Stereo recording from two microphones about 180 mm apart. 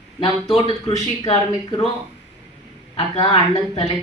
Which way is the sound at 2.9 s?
35° left (ahead or behind).